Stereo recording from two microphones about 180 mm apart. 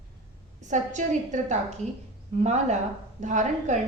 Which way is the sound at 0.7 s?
45° right (ahead or behind).